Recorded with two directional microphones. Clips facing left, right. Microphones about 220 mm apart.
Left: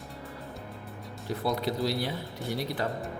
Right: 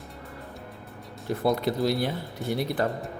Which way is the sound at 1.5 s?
55° right (ahead or behind).